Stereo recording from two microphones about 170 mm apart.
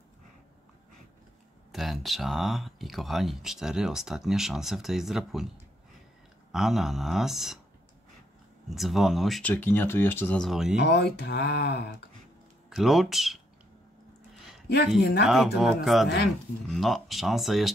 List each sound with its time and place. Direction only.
1.7 s speech: centre (ahead or behind)
6.5 s speech: centre (ahead or behind)
8.6 s speech: centre (ahead or behind)
9.5 s speech: 10° left (ahead or behind)
10.4 s speech: centre (ahead or behind)
10.8 s speech: 75° left (ahead or behind)
12.6 s speech: centre (ahead or behind)
15.2 s speech: centre (ahead or behind)